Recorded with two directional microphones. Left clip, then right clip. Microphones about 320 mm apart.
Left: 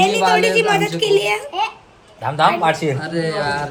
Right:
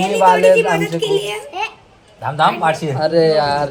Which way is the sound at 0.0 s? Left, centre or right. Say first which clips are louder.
Right 3 dB; centre.